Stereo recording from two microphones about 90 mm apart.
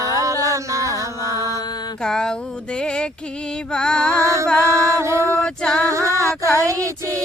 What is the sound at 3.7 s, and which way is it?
Mantra, 10° left (ahead or behind).